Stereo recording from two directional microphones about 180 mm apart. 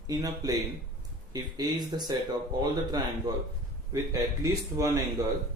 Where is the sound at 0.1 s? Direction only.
20° right (ahead or behind).